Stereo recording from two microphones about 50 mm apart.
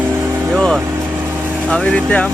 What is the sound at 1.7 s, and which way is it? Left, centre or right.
Speech, left.